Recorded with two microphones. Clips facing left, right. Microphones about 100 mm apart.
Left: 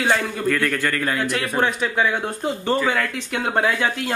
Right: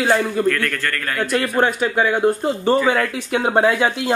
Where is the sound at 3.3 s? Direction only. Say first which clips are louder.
Right 6 dB; 20° right (ahead or behind).